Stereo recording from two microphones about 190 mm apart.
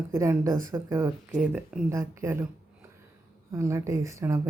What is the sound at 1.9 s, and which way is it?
Speech, 15° right (ahead or behind).